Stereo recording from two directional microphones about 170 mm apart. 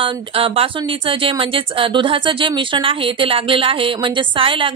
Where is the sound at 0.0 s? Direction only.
30° right (ahead or behind).